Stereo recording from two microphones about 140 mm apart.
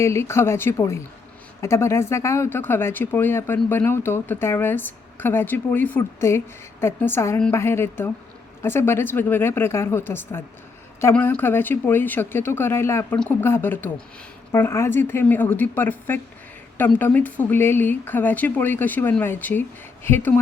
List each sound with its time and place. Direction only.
0.0 s speech: 20° left (ahead or behind)